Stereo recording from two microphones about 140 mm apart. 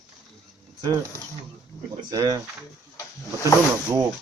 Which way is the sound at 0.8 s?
30° right (ahead or behind).